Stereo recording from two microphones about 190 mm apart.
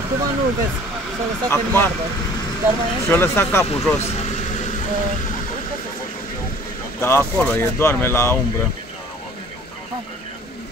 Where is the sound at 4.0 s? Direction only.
35° left (ahead or behind).